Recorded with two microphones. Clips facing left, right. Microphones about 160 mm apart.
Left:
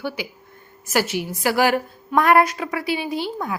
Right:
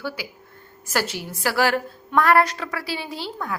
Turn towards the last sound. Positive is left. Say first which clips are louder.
# left 5 dB
turn(degrees=15)  # may be behind; listen again after turning